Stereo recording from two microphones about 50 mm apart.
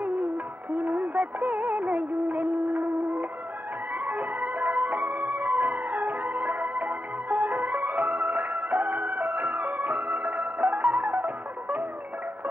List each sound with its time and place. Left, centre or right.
0.0 s music: right